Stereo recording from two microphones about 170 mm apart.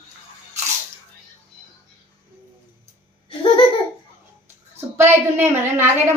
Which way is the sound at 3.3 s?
30° left (ahead or behind).